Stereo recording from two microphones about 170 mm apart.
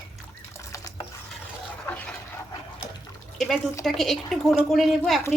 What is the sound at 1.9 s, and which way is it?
Dog, 10° left (ahead or behind).